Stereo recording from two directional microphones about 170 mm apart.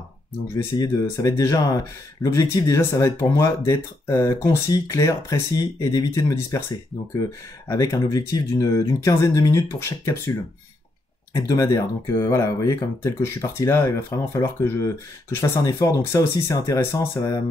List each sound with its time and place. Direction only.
0.7 s speech: 20° left (ahead or behind)
11.3 s speech: 20° left (ahead or behind)